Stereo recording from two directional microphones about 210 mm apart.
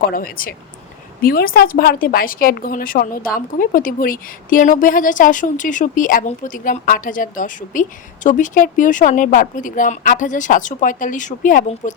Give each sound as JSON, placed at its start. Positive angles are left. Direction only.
{"t": 0.1, "sound": "speech", "side_deg": 45}